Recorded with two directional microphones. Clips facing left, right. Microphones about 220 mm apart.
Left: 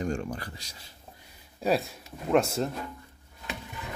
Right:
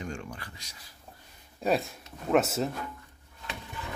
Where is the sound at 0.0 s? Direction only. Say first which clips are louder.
Left 7 dB; 40° left (ahead or behind).